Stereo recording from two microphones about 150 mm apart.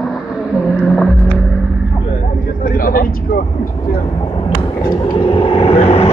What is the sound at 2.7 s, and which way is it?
Vehicle, 75° left (ahead or behind).